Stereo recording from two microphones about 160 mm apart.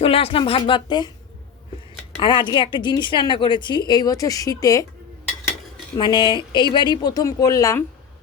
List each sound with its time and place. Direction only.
0.0 s a woman's voice: 35° left (ahead or behind)
2.1 s a woman's voice: 30° left (ahead or behind)
6.0 s a woman's voice: 25° left (ahead or behind)